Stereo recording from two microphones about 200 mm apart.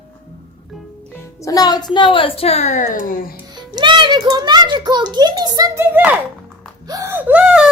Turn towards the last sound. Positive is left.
turn(degrees=-5)  # may be behind; listen again after turning